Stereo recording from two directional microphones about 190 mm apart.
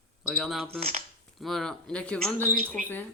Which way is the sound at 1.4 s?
Centre (ahead or behind).